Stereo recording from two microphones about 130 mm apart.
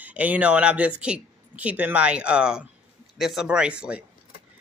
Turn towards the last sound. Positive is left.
turn(degrees=-10)  # may be behind; listen again after turning